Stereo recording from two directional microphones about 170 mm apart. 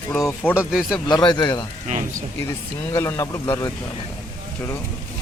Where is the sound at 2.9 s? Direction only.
15° left (ahead or behind).